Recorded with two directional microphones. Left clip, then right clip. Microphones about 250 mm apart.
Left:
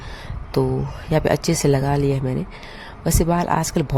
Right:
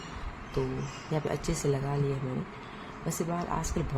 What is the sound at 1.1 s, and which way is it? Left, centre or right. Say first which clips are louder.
Speech: left 14 dB; left.